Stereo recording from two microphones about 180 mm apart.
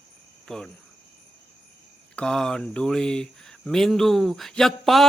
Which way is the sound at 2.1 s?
5° left (ahead or behind).